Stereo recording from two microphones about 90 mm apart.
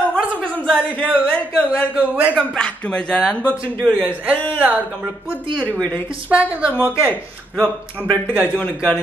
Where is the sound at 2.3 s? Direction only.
10° left (ahead or behind).